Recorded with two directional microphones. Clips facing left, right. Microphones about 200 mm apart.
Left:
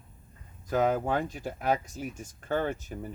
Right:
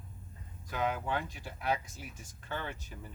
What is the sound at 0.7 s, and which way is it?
Speech, 45° left (ahead or behind).